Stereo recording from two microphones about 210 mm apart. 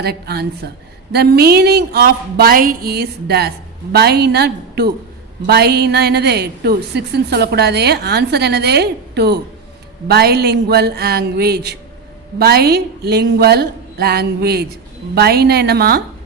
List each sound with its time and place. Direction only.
0.0 s a woman's voice: 50° right (ahead or behind)